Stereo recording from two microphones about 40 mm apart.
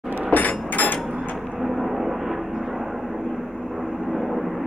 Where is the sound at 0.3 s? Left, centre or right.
Left.